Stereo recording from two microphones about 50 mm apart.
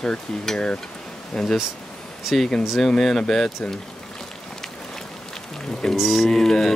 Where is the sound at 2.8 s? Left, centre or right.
Centre.